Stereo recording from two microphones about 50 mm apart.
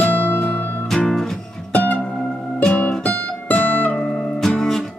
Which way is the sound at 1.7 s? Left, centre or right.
Left.